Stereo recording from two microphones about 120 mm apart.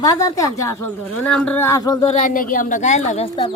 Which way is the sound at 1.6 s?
30° left (ahead or behind).